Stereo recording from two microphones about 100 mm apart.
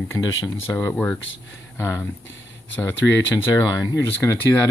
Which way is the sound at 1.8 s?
30° left (ahead or behind).